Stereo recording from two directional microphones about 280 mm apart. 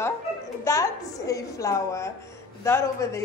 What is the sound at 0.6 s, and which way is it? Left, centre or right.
A woman's voice, centre.